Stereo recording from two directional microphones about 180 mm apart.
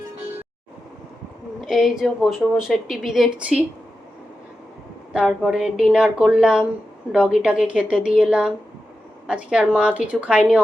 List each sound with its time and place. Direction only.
1.6 s speech: centre (ahead or behind)
5.1 s a woman's voice: 5° right (ahead or behind)